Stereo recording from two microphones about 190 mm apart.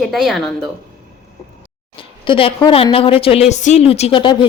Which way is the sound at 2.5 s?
25° left (ahead or behind).